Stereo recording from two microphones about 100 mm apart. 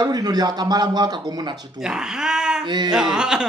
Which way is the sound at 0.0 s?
40° right (ahead or behind).